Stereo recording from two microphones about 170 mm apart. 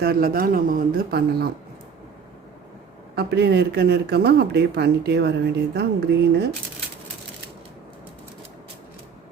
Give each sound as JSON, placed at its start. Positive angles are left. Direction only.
{"t": 0.0, "sound": "speech", "side_deg": -60}
{"t": 3.2, "sound": "speech", "side_deg": -75}